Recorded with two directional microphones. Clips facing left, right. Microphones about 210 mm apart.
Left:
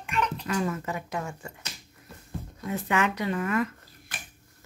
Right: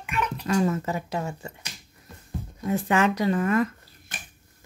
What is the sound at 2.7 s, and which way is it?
Speech, 35° right (ahead or behind).